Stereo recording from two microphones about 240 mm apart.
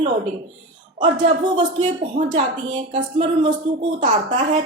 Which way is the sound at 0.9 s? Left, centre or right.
Right.